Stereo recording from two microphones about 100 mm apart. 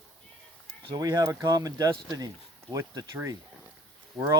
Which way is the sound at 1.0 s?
40° right (ahead or behind).